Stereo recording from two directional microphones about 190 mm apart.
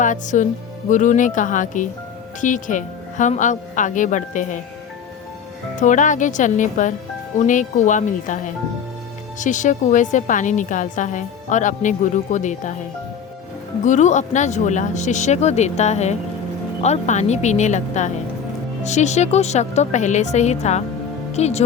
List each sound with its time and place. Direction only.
0.0 s a woman's voice: 40° left (ahead or behind)
5.8 s a woman's voice: 40° left (ahead or behind)
13.8 s a woman's voice: 40° left (ahead or behind)